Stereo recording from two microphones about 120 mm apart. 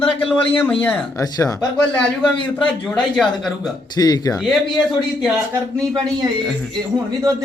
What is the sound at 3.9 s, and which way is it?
Speech, 30° left (ahead or behind).